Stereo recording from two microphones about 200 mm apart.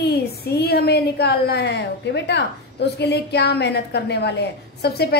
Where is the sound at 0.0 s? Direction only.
55° left (ahead or behind).